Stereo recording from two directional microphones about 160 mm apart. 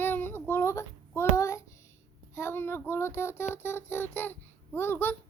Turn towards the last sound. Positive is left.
turn(degrees=15)  # may be behind; listen again after turning